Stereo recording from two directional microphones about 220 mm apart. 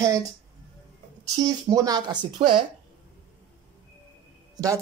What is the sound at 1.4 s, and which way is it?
Speech, 15° right (ahead or behind).